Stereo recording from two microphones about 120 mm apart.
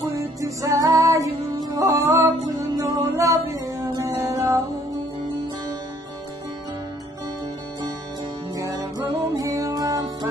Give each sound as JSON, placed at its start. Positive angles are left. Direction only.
{"t": 0.1, "sound": "music", "side_deg": -25}
{"t": 8.5, "sound": "music", "side_deg": -30}